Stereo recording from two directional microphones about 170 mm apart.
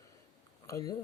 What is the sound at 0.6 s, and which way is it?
Speech, 20° left (ahead or behind).